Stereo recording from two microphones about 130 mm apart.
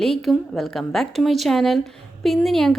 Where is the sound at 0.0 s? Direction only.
Centre (ahead or behind).